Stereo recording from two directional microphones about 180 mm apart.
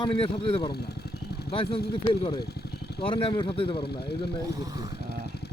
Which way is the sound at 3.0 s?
30° left (ahead or behind).